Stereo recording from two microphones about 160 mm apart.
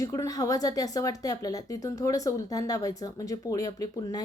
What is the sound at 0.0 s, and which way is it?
A woman's voice, 20° left (ahead or behind).